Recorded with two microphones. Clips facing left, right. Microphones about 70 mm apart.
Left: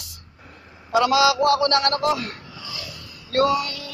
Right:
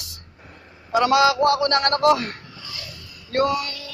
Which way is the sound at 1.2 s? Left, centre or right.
Right.